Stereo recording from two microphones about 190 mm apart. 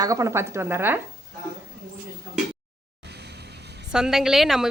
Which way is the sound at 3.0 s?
60° right (ahead or behind).